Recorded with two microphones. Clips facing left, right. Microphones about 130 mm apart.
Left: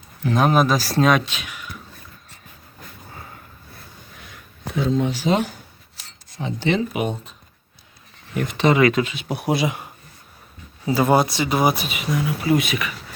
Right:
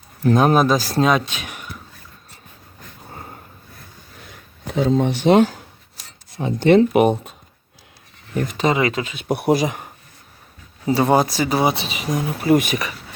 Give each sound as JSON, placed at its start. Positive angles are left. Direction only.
{"t": 0.2, "sound": "speech", "side_deg": -45}
{"t": 4.9, "sound": "speech", "side_deg": -55}
{"t": 6.4, "sound": "speech", "side_deg": -55}
{"t": 8.4, "sound": "speech", "side_deg": -35}
{"t": 8.7, "sound": "speech", "side_deg": -25}
{"t": 9.0, "sound": "speech", "side_deg": -35}
{"t": 9.3, "sound": "speech", "side_deg": -60}
{"t": 9.6, "sound": "speech", "side_deg": -45}
{"t": 10.8, "sound": "speech", "side_deg": -30}
{"t": 11.6, "sound": "speech", "side_deg": -25}